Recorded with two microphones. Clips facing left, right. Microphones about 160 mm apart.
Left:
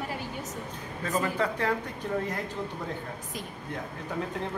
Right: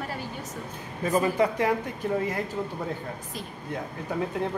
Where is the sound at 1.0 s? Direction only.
15° right (ahead or behind).